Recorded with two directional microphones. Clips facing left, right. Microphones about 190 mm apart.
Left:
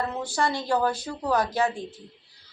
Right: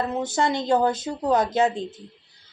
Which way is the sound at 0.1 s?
20° right (ahead or behind).